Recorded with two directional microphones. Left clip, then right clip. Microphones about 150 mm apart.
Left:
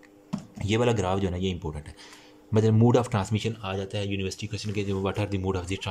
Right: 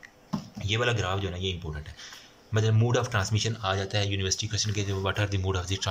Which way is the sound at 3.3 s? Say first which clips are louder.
Right 2 dB; 20° left (ahead or behind).